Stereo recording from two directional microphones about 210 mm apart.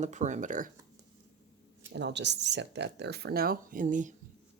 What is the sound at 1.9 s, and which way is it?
Speech, 55° right (ahead or behind).